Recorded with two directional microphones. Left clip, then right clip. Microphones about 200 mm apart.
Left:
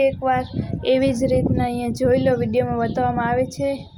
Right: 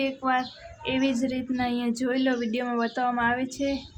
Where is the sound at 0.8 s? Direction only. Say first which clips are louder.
Left 8 dB; 20° left (ahead or behind).